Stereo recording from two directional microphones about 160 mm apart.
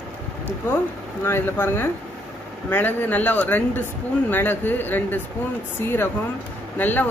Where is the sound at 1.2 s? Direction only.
15° left (ahead or behind).